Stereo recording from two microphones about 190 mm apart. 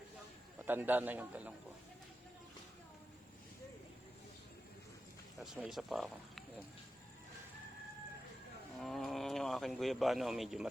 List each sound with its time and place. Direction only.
0.6 s a man's voice: 10° right (ahead or behind)
5.4 s speech: centre (ahead or behind)
8.8 s speech: centre (ahead or behind)